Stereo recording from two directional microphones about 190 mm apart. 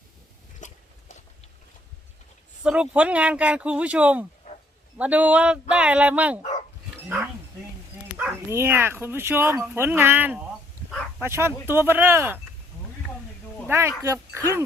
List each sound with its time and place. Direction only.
0.6 s a sound: 40° left (ahead or behind)
2.6 s speech: 5° right (ahead or behind)
6.4 s dog: 35° left (ahead or behind)
8.2 s speech: 10° right (ahead or behind)
13.7 s speech: 15° right (ahead or behind)